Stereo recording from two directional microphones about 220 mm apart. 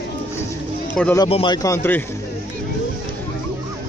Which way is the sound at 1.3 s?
20° left (ahead or behind).